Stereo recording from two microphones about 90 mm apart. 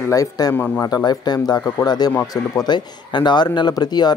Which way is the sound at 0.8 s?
50° left (ahead or behind).